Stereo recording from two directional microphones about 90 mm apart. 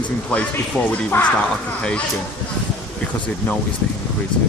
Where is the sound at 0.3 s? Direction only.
15° left (ahead or behind).